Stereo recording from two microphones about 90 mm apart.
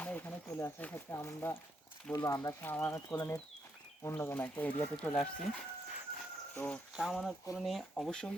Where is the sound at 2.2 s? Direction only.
45° left (ahead or behind).